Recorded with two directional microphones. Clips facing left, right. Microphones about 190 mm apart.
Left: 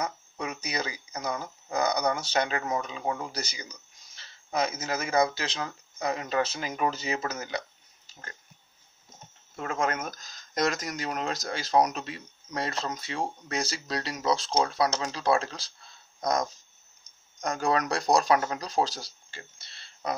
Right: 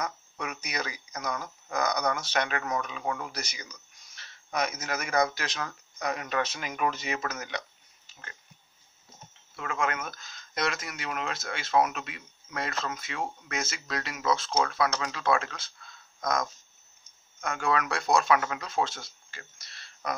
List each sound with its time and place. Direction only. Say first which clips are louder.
0.0 s speech: left 2 dB; 30° left (ahead or behind)
9.6 s speech: left 2 dB; 40° left (ahead or behind)